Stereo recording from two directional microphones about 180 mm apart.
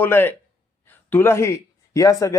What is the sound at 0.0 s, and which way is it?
Speech, 10° left (ahead or behind).